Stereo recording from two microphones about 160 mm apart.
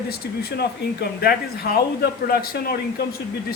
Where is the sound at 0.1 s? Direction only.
85° left.